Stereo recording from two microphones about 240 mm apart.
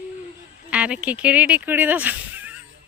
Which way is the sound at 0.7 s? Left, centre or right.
Centre.